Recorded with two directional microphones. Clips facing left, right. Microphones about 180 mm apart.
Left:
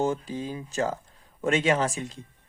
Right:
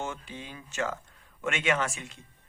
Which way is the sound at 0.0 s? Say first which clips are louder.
Left 10 dB; 35° left (ahead or behind).